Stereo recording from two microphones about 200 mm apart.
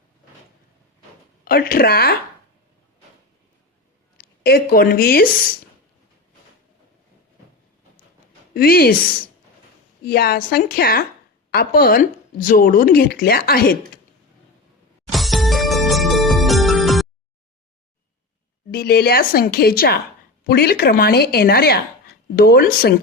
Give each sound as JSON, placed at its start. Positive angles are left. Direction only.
{"t": 1.5, "sound": "speech", "side_deg": 45}
{"t": 4.2, "sound": "a woman's voice", "side_deg": 50}
{"t": 8.5, "sound": "speech", "side_deg": 50}
{"t": 10.1, "sound": "speech", "side_deg": 50}
{"t": 15.1, "sound": "music", "side_deg": 0}
{"t": 18.7, "sound": "speech", "side_deg": 50}